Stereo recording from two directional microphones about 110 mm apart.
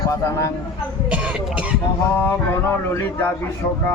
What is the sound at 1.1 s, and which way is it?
Speech, 10° right (ahead or behind).